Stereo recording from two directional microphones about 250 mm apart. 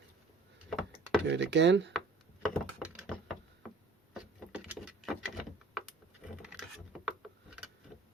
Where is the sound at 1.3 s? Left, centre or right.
Right.